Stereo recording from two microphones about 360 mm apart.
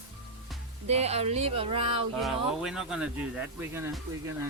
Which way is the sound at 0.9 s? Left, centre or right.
Centre.